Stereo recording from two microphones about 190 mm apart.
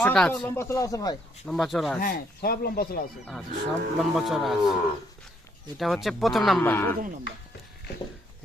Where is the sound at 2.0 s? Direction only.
50° left (ahead or behind).